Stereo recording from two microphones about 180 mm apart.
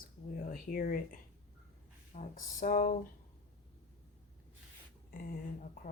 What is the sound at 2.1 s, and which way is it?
Speech, 45° left (ahead or behind).